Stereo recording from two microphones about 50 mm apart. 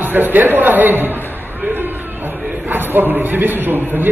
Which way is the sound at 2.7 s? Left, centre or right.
Right.